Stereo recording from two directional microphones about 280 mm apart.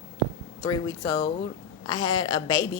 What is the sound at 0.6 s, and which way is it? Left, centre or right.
A woman's voice, centre.